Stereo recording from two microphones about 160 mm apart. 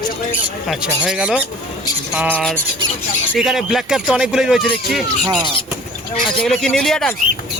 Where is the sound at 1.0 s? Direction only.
5° right (ahead or behind).